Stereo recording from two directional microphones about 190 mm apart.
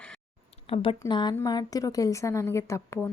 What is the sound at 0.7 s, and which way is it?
A woman's voice, 30° left (ahead or behind).